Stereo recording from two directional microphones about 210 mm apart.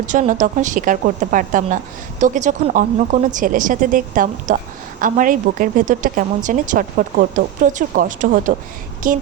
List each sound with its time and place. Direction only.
0.1 s a woman's voice: 35° right (ahead or behind)